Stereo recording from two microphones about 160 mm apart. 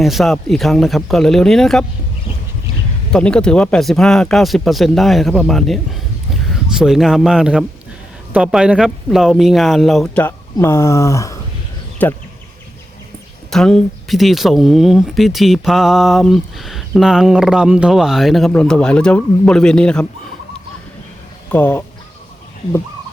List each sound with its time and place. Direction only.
0.0 s speech: centre (ahead or behind)
3.1 s speech: 5° left (ahead or behind)
10.2 s speech: 15° left (ahead or behind)
13.5 s speech: 5° left (ahead or behind)
21.5 s speech: 10° left (ahead or behind)